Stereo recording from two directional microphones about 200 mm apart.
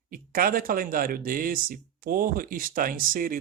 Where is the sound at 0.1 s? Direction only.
45° right (ahead or behind).